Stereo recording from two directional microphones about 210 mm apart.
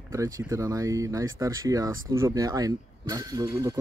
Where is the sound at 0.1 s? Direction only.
15° right (ahead or behind).